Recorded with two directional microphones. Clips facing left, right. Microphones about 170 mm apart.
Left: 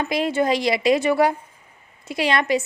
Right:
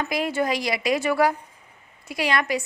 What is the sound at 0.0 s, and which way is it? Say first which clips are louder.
Speech: left 3 dB; 25° left (ahead or behind).